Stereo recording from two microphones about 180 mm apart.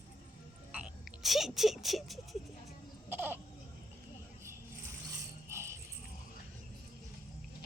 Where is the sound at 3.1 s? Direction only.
10° right (ahead or behind).